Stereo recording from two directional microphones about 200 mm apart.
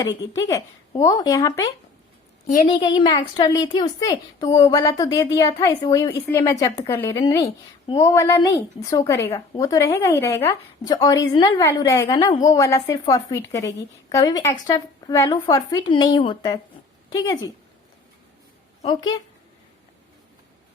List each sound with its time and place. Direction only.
0.0 s a woman's voice: 15° left (ahead or behind)
18.9 s a woman's voice: 20° left (ahead or behind)